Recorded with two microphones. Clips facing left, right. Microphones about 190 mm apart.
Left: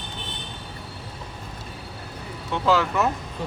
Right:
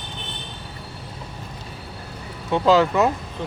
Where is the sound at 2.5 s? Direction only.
15° right (ahead or behind).